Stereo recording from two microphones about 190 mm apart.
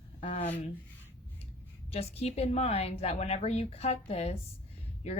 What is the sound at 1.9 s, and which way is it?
A woman's voice, 35° left (ahead or behind).